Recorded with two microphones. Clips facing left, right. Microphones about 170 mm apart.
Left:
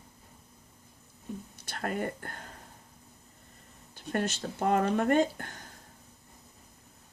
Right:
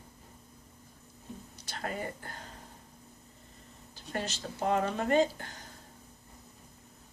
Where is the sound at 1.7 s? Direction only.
55° left (ahead or behind).